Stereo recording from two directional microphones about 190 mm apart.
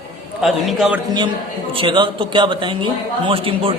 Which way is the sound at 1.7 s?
25° right (ahead or behind).